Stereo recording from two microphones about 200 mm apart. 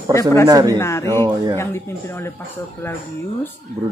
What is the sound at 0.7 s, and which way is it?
Speech, 15° left (ahead or behind).